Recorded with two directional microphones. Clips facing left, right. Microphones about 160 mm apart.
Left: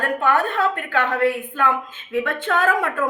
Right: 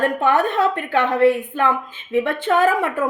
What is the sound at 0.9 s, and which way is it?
Speech, 20° right (ahead or behind).